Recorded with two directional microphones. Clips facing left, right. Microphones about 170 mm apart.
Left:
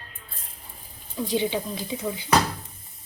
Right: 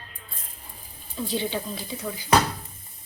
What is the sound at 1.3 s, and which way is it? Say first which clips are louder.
Speech: left 3 dB; 15° left (ahead or behind).